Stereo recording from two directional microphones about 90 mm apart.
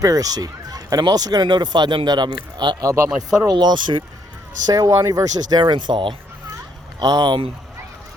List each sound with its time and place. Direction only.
0.0 s speech: 40° right (ahead or behind)
2.8 s speech: 35° right (ahead or behind)
3.2 s speech: 50° right (ahead or behind)
4.6 s speech: 45° right (ahead or behind)
5.5 s speech: 55° right (ahead or behind)
7.0 s speech: 50° right (ahead or behind)